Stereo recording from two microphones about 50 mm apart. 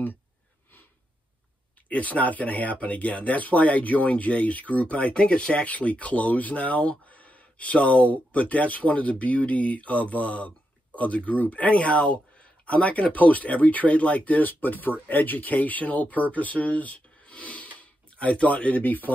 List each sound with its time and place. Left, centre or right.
1.9 s speech: left